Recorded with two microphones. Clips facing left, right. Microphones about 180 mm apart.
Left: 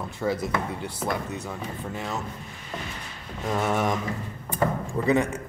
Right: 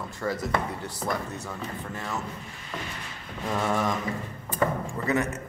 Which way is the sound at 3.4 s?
15° left (ahead or behind).